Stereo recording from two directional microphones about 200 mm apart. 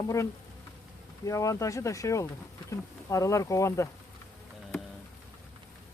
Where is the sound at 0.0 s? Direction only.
15° left (ahead or behind).